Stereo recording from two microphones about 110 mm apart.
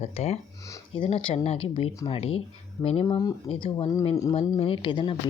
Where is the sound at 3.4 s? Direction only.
55° left (ahead or behind).